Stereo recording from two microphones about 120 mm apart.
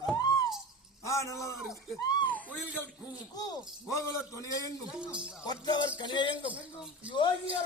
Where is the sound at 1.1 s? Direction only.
25° left (ahead or behind).